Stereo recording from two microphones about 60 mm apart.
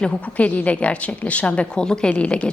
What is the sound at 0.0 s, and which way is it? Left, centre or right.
A woman's voice, left.